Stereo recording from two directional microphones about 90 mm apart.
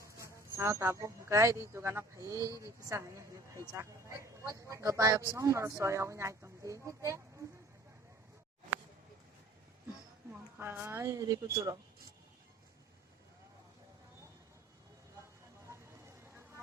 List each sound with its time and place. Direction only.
0.0 s speech: 35° right (ahead or behind)
10.6 s speech: 25° right (ahead or behind); by 11.8 s 45° right (ahead or behind)